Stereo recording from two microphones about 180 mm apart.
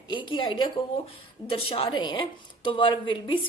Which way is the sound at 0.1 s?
25° left (ahead or behind).